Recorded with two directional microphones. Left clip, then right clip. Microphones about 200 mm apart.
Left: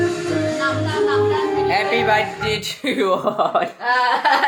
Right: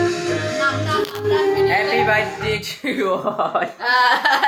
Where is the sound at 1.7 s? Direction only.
5° left (ahead or behind).